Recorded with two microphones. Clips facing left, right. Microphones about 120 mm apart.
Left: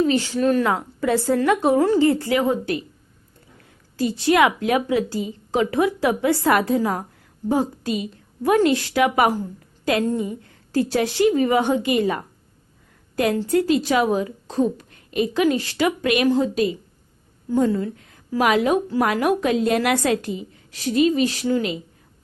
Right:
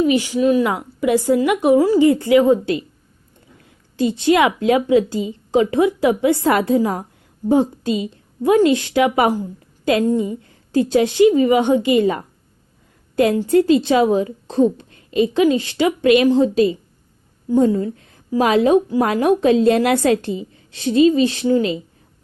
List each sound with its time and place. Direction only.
0.0 s a woman's voice: 15° right (ahead or behind)
3.9 s a woman's voice: 20° right (ahead or behind)
17.7 s a woman's voice: 30° right (ahead or behind)